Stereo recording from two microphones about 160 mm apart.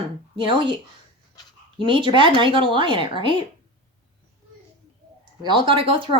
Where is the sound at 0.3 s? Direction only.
30° right (ahead or behind).